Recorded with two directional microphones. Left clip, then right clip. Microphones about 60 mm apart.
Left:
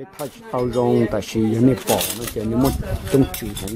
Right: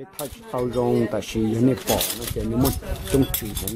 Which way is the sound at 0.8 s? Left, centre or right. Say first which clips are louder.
Left 4 dB; centre.